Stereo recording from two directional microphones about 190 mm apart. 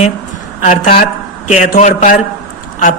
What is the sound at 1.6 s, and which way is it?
Speech, 40° left (ahead or behind).